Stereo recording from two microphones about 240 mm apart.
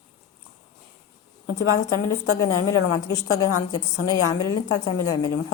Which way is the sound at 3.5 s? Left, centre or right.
Left.